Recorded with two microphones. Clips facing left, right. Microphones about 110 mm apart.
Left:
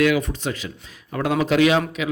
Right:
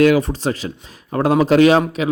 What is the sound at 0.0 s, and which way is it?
A man's voice, 35° right (ahead or behind).